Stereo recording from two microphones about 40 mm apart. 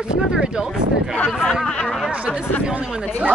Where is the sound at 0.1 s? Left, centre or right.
Right.